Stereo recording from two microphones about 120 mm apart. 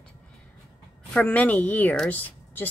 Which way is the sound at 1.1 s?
10° left (ahead or behind).